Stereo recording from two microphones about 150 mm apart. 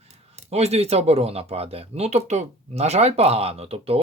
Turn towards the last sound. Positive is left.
turn(degrees=-40)  # may be behind; listen again after turning